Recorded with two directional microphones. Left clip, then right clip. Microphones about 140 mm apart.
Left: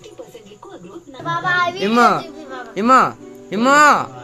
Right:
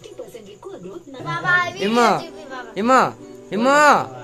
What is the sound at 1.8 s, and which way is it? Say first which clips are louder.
Speech: left 3 dB; centre (ahead or behind).